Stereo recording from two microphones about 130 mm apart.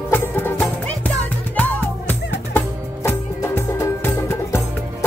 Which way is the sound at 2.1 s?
15° left (ahead or behind).